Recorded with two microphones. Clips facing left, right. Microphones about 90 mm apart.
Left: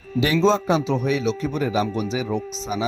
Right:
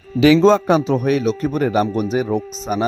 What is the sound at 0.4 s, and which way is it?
A man's voice, 60° right (ahead or behind).